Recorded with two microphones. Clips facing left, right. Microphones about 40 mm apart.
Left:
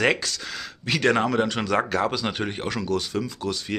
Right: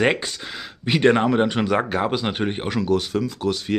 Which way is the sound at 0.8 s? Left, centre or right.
Right.